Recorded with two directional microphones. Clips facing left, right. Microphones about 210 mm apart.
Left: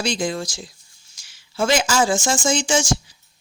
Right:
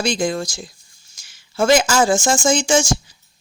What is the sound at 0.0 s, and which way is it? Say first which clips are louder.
Speech: right 3 dB; 50° right (ahead or behind).